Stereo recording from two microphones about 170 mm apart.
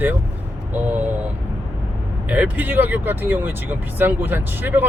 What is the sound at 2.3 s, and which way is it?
Speech, 10° right (ahead or behind).